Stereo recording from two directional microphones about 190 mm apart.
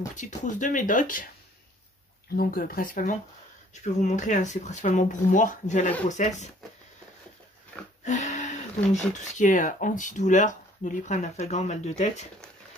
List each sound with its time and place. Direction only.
0.1 s speech: 40° left (ahead or behind)
2.3 s speech: 50° left (ahead or behind)
8.0 s speech: 40° left (ahead or behind)